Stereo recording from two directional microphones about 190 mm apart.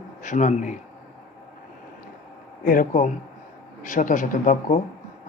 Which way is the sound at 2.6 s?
45° left (ahead or behind).